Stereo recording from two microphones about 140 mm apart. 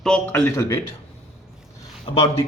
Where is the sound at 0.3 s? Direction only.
15° left (ahead or behind).